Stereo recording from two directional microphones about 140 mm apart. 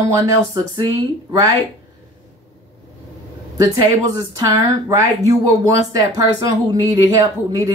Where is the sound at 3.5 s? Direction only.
25° right (ahead or behind).